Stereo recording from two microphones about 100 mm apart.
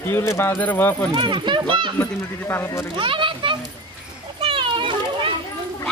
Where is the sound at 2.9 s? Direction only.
55° right (ahead or behind).